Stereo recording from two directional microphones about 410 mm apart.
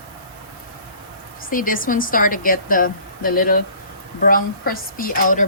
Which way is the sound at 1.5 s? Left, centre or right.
Centre.